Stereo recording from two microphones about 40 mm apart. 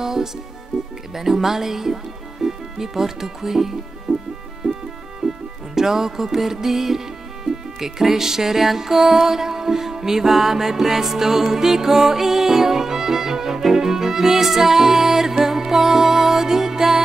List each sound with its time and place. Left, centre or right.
0.0 s speech: centre
1.1 s music: centre
2.4 s speech: centre
4.1 s music: centre